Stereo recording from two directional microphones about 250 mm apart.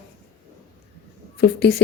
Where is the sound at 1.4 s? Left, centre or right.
Left.